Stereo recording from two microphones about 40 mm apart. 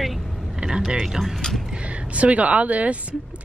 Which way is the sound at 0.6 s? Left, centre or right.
Centre.